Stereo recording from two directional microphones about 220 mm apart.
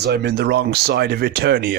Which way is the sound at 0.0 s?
50° right (ahead or behind).